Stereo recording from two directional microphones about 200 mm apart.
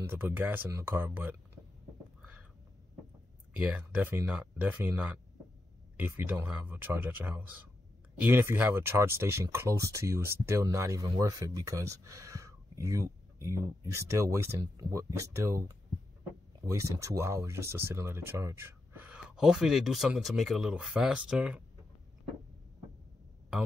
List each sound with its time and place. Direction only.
0.1 s speech: 10° right (ahead or behind)
3.5 s speech: 5° right (ahead or behind)